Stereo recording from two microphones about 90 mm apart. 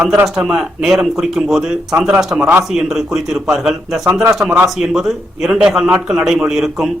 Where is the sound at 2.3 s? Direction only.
20° right (ahead or behind).